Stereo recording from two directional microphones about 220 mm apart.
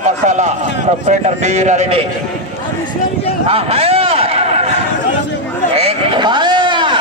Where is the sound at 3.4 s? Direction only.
25° right (ahead or behind).